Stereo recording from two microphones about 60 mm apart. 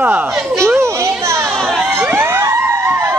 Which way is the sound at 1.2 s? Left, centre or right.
Right.